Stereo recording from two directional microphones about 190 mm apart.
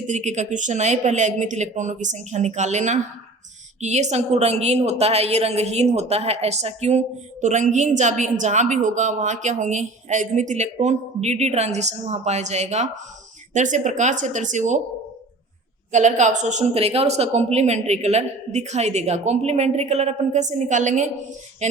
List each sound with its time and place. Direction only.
0.1 s a woman's voice: 40° right (ahead or behind)
15.9 s a woman's voice: 40° right (ahead or behind)